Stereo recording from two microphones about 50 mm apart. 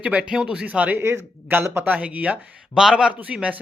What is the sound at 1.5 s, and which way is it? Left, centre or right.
Speech, right.